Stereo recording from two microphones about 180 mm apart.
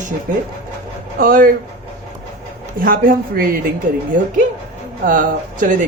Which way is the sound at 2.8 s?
55° right (ahead or behind).